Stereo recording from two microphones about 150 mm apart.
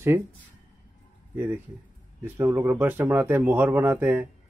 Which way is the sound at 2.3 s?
15° right (ahead or behind).